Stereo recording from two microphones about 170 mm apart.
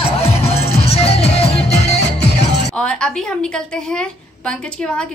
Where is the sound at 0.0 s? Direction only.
35° left (ahead or behind).